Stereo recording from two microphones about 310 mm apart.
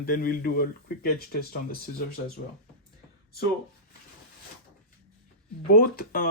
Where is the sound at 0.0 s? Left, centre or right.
Left.